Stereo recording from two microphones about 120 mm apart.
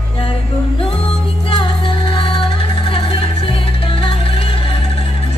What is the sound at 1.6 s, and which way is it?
Music, 45° left (ahead or behind).